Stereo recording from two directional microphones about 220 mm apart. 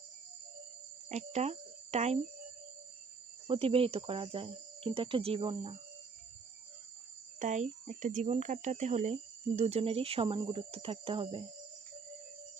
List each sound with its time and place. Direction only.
1.1 s speech: 30° right (ahead or behind)
3.4 s speech: 25° right (ahead or behind)
7.3 s speech: 35° right (ahead or behind)